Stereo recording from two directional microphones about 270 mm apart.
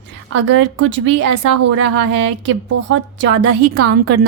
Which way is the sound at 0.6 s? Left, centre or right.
Right.